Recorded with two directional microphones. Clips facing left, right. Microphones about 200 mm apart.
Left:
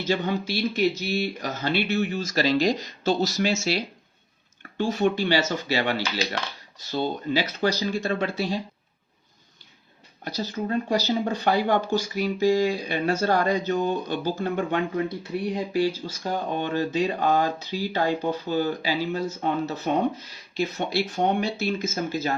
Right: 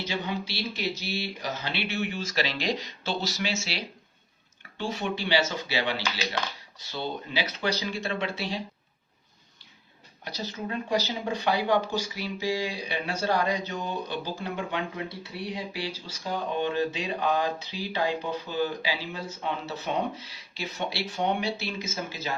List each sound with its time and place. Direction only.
0.0 s speech: 45° left (ahead or behind)
10.2 s speech: 40° left (ahead or behind)